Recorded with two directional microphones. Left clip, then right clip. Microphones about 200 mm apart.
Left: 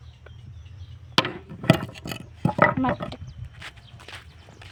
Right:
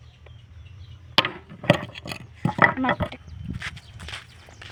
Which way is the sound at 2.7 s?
10° left (ahead or behind).